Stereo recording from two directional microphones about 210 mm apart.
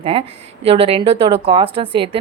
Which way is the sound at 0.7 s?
30° right (ahead or behind).